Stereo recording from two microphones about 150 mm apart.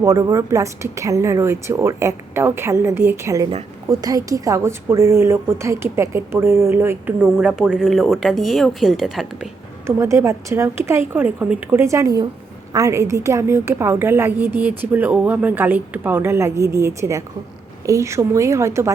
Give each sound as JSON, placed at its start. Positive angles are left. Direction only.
{"t": 0.0, "sound": "a woman's voice", "side_deg": -20}
{"t": 7.3, "sound": "speech", "side_deg": -5}
{"t": 9.8, "sound": "a woman's voice", "side_deg": -20}